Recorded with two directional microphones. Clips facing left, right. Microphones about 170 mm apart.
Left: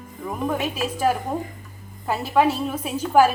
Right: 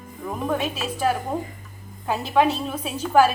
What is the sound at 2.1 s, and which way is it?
A woman's voice, 5° left (ahead or behind).